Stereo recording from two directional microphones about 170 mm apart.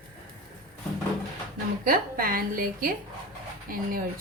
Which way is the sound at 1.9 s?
55° right (ahead or behind).